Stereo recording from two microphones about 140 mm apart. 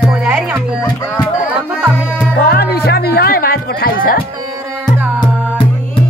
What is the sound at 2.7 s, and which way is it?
Music, 90° left.